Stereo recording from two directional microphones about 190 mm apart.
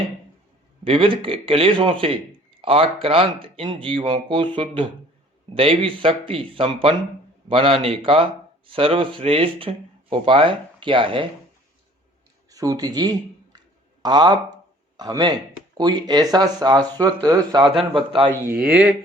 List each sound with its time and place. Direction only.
0.9 s speech: 25° right (ahead or behind)
12.5 s a sound: 20° right (ahead or behind)
15.8 s speech: 20° right (ahead or behind)
18.4 s speech: 10° right (ahead or behind)